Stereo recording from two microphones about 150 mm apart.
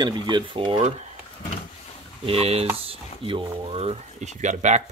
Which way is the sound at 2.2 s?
40° right (ahead or behind).